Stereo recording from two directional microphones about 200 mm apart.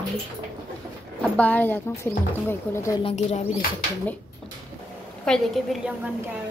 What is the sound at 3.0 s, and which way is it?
Speech, 30° left (ahead or behind).